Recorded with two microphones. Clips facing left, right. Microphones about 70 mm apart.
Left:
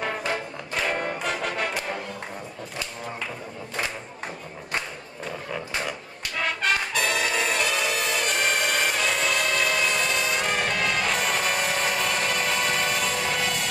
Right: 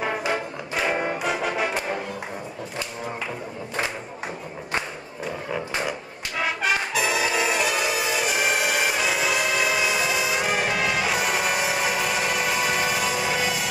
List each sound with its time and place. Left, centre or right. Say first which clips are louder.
0.0 s brass instrument: right 3 dB; centre
5.5 s music: right 3 dB; centre